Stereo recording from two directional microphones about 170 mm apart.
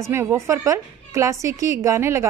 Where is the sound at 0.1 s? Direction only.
15° right (ahead or behind).